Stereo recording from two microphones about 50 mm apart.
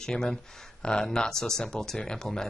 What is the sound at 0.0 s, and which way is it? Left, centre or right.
Speech, centre.